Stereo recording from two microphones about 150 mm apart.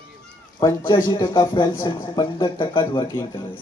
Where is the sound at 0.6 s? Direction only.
25° left (ahead or behind).